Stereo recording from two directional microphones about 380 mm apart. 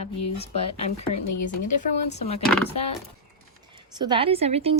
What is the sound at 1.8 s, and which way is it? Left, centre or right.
Speech, centre.